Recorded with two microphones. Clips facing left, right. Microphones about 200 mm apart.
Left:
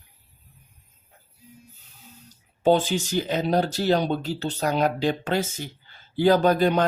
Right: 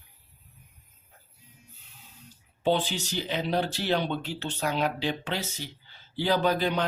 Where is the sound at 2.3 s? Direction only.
45° left (ahead or behind).